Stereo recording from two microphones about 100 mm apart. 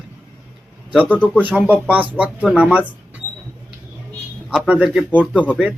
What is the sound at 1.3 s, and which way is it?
Speech, 15° right (ahead or behind).